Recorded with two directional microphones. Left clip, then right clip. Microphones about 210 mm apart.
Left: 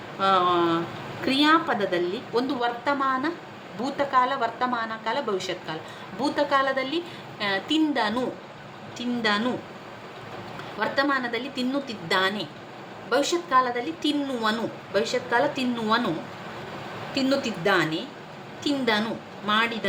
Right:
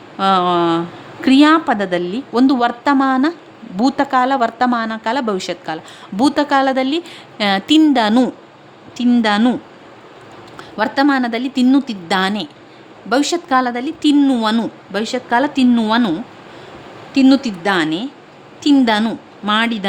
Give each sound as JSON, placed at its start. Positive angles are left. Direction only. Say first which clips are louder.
{"t": 0.2, "sound": "speech", "louder": "right 7 dB", "side_deg": -50}
{"t": 10.8, "sound": "speech", "louder": "right 9 dB", "side_deg": -55}
{"t": 17.2, "sound": "speech", "louder": "right 11 dB", "side_deg": -55}